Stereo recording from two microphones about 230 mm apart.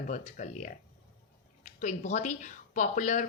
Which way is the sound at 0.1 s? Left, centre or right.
Left.